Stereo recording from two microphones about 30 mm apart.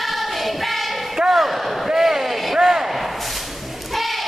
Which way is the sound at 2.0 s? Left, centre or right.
Centre.